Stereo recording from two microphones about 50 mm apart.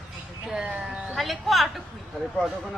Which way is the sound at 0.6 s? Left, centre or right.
Right.